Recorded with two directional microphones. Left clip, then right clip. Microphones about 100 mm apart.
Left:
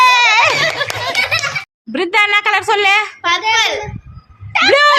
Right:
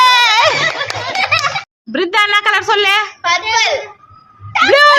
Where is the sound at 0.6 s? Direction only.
35° left (ahead or behind).